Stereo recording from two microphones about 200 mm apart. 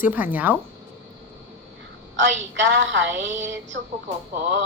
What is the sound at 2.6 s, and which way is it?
Speech, 70° right (ahead or behind).